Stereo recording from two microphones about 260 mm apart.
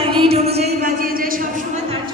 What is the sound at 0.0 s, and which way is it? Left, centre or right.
Speech, right.